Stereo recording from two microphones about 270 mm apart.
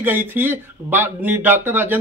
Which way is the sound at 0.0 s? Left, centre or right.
Centre.